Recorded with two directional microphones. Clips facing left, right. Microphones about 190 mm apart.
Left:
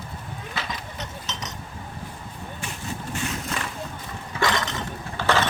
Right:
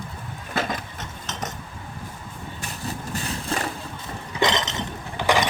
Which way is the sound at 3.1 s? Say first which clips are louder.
Right 1 dB; 35° right (ahead or behind).